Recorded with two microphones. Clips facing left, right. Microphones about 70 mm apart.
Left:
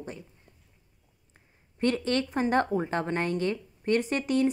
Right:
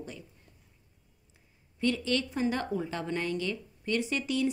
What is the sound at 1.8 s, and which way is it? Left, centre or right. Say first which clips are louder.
A woman's voice: left 3 dB; left.